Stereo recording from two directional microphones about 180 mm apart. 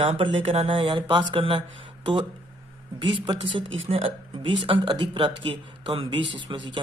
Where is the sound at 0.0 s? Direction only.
30° right (ahead or behind).